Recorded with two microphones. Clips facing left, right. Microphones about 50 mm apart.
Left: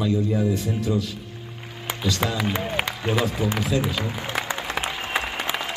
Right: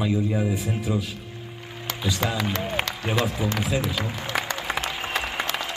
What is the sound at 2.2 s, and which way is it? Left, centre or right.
Speech, centre.